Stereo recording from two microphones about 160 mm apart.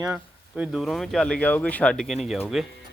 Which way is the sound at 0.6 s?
Centre (ahead or behind).